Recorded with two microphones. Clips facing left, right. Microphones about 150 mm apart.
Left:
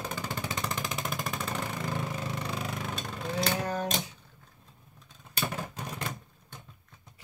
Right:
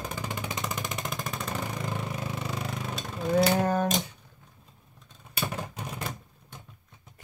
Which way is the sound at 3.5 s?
50° right (ahead or behind).